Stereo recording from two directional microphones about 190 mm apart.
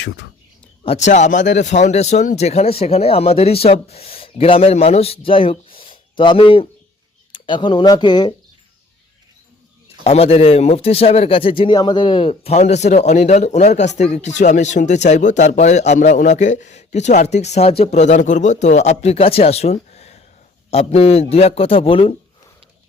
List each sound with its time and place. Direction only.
0.9 s speech: 35° left (ahead or behind); by 8.3 s 20° left (ahead or behind)
10.0 s speech: 30° left (ahead or behind)